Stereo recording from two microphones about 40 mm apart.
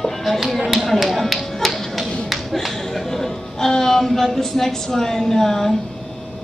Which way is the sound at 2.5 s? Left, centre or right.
Centre.